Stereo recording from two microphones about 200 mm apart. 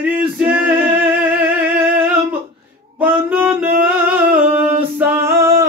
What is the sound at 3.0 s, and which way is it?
Music, 10° right (ahead or behind).